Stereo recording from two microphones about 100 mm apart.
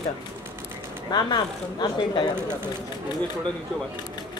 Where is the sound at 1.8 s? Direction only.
60° left (ahead or behind).